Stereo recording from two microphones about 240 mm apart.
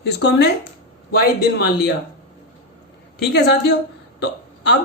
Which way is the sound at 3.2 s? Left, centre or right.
Left.